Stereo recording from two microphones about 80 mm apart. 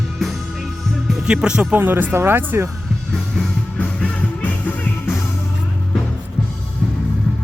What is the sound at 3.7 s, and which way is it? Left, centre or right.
Music, centre.